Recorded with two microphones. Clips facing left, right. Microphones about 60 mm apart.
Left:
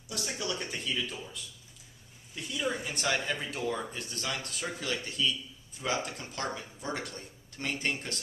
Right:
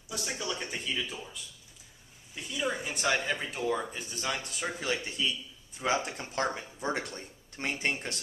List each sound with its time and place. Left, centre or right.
0.1 s speech: centre; by 8.2 s right